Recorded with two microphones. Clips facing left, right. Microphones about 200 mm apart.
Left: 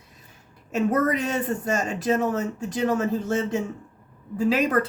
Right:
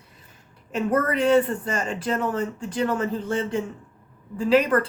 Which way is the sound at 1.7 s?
45° left (ahead or behind).